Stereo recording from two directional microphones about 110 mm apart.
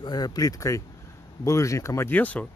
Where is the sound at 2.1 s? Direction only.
15° left (ahead or behind).